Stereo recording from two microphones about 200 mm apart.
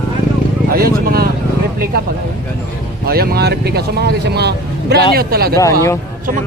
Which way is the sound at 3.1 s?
50° right (ahead or behind).